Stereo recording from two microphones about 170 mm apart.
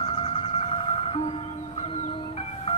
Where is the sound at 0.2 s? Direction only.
30° left (ahead or behind).